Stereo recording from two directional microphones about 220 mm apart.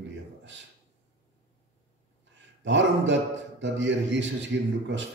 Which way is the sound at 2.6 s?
55° right (ahead or behind).